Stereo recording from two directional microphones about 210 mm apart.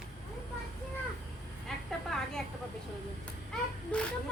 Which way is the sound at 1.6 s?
Centre (ahead or behind).